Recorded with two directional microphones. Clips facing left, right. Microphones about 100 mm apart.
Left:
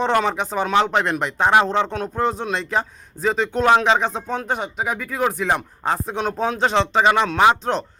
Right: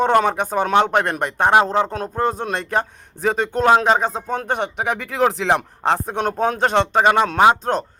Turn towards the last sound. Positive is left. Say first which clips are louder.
# right 2 dB
turn(degrees=-40)  # may be behind; listen again after turning